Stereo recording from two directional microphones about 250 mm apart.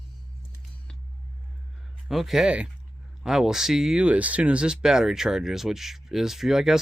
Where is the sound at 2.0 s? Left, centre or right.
Centre.